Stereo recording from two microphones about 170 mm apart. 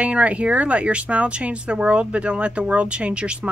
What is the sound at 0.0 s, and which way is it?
Speech, 5° right (ahead or behind).